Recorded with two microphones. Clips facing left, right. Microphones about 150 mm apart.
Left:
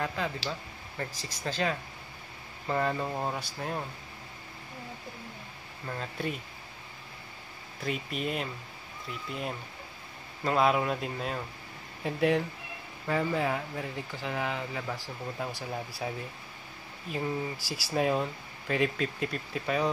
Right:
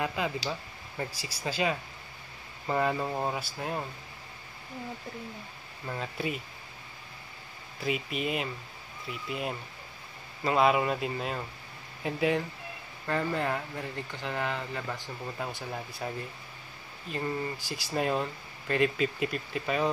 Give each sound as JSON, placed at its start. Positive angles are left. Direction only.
{"t": 0.0, "sound": "speech", "side_deg": -10}
{"t": 5.9, "sound": "speech", "side_deg": -5}
{"t": 7.8, "sound": "speech", "side_deg": -5}